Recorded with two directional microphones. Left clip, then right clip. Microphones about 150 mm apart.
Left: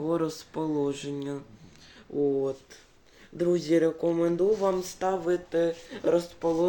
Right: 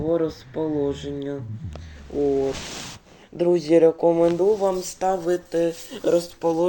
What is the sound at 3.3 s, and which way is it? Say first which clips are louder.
Speech: right 7 dB; 15° right (ahead or behind).